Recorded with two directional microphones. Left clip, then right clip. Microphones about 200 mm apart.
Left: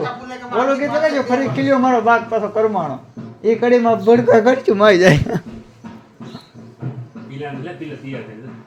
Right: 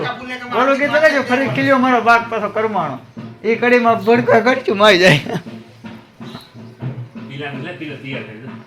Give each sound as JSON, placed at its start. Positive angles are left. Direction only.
{"t": 0.6, "sound": "a man's voice", "side_deg": 5}
{"t": 4.4, "sound": "speech", "side_deg": 30}